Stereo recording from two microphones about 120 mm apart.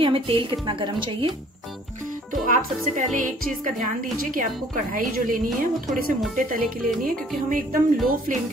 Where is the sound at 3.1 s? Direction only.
90° right.